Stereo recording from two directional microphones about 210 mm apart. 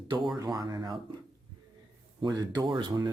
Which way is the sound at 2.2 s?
20° right (ahead or behind).